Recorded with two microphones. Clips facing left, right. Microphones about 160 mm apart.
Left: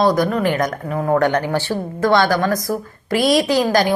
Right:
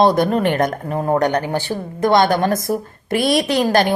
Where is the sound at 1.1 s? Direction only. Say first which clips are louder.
Left 2 dB; 20° right (ahead or behind).